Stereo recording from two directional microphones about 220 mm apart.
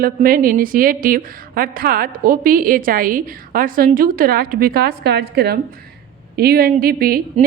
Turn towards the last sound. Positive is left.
turn(degrees=-45)  # may be behind; listen again after turning